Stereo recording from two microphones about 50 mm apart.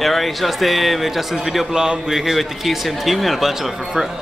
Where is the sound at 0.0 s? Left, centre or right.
Centre.